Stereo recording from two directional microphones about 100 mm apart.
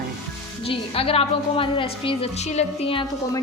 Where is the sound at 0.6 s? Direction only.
70° left (ahead or behind).